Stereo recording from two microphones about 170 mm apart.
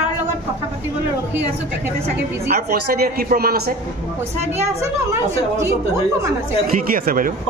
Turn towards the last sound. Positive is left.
turn(degrees=-55)  # may be behind; listen again after turning